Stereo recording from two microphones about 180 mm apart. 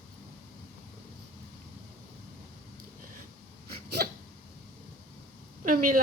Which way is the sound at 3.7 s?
60° right (ahead or behind).